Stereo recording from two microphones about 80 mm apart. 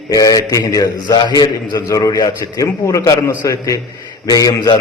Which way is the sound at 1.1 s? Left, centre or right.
Left.